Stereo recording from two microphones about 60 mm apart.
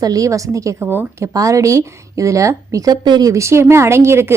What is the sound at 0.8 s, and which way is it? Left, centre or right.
Speech, right.